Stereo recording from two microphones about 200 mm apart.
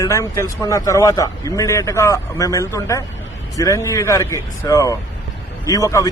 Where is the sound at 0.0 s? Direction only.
15° left (ahead or behind).